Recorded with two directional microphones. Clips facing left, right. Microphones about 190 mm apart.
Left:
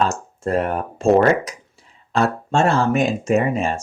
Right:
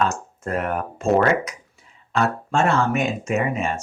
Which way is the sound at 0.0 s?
30° left (ahead or behind).